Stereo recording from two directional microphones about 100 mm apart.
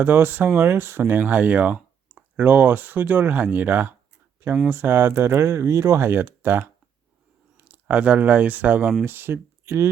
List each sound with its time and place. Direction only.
0.0 s speech: 20° right (ahead or behind)